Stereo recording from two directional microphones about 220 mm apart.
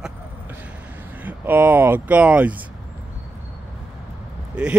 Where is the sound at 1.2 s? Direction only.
10° right (ahead or behind).